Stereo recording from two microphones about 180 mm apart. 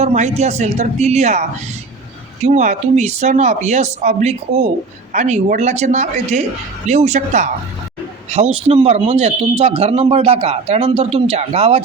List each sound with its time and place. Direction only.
0.0 s speech: 40° right (ahead or behind)